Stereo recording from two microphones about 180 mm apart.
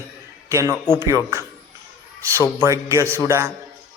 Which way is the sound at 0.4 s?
15° right (ahead or behind).